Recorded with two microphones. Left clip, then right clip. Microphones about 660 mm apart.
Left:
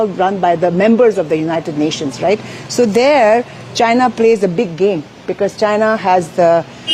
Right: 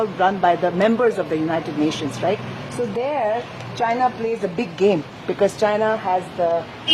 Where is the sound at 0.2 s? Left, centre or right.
Left.